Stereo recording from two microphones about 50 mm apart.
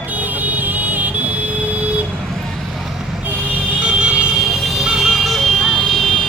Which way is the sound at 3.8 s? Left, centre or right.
Right.